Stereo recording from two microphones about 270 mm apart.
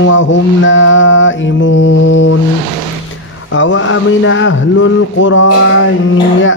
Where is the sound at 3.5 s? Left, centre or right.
Left.